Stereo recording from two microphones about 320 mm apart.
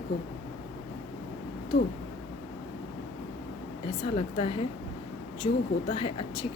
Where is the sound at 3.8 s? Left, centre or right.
Centre.